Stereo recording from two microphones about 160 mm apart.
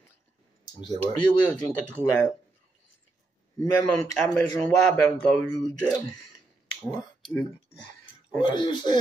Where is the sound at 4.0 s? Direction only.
5° left (ahead or behind).